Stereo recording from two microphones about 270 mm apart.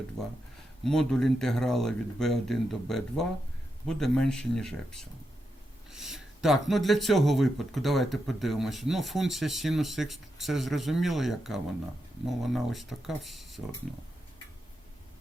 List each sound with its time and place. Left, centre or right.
0.9 s speech: centre